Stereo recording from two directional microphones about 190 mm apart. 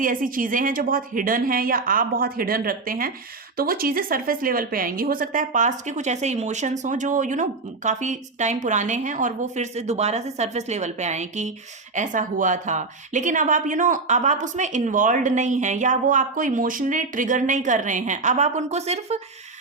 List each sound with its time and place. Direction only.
0.0 s a woman's voice: 45° right (ahead or behind)